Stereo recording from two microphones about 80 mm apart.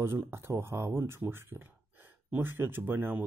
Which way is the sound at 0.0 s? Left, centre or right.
Right.